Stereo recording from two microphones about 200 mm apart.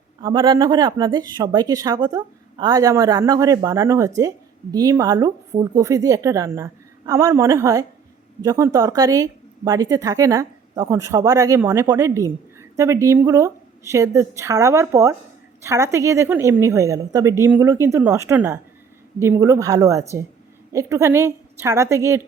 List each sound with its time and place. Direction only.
0.2 s speech: 25° right (ahead or behind)